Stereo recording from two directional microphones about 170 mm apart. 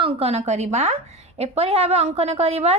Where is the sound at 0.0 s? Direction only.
35° right (ahead or behind).